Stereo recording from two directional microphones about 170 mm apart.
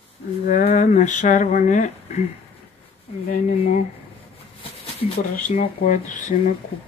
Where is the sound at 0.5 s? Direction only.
50° left (ahead or behind).